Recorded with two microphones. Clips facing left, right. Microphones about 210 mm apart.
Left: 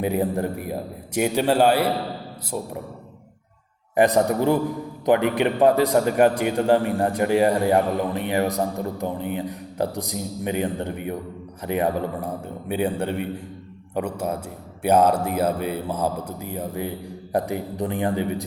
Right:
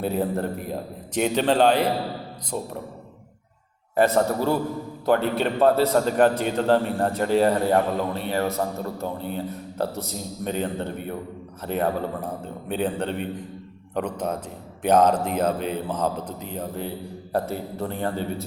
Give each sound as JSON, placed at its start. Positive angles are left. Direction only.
{"t": 0.0, "sound": "a man's voice", "side_deg": 15}
{"t": 3.9, "sound": "a man's voice", "side_deg": 15}